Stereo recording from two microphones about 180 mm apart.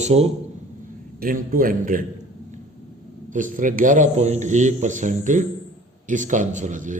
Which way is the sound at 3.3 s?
45° right (ahead or behind).